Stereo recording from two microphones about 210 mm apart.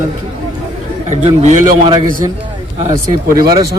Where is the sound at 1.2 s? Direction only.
35° right (ahead or behind).